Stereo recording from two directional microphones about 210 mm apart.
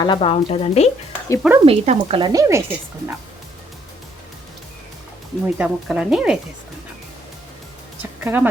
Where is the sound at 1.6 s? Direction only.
30° right (ahead or behind).